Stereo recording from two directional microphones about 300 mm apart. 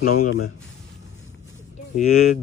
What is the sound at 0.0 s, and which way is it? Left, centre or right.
Speech, left.